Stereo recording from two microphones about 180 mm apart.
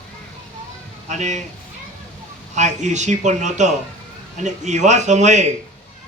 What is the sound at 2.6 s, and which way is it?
A man's voice, 40° right (ahead or behind).